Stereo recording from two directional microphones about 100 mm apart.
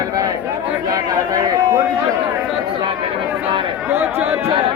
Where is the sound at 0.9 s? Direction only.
40° right (ahead or behind).